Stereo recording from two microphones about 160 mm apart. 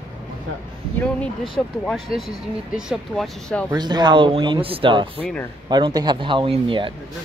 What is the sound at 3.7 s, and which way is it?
Speech, 25° right (ahead or behind).